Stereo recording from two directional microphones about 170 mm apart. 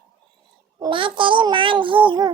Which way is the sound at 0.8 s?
30° right (ahead or behind).